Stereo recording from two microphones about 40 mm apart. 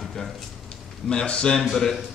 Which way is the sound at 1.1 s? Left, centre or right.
Left.